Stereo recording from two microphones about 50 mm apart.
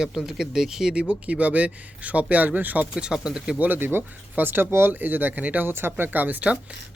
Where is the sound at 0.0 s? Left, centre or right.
Centre.